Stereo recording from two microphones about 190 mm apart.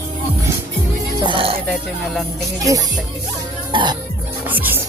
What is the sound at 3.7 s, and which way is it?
Speech, 25° right (ahead or behind).